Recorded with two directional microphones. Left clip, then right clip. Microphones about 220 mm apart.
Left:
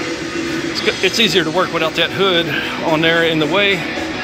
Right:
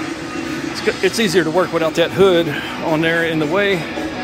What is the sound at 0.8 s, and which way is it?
Speech, 25° right (ahead or behind).